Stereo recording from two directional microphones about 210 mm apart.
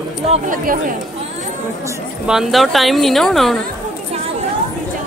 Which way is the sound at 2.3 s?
Centre (ahead or behind).